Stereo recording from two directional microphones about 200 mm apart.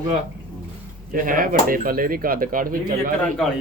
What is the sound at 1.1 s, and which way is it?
Speech, 45° right (ahead or behind).